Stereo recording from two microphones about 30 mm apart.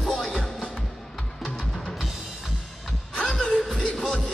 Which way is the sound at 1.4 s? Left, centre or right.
Centre.